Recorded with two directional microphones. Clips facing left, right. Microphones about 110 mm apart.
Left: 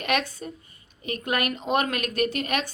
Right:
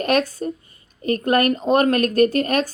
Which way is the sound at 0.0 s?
40° right (ahead or behind).